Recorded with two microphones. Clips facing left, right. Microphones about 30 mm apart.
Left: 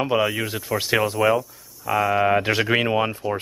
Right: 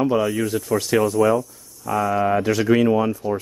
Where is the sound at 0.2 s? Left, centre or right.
Left.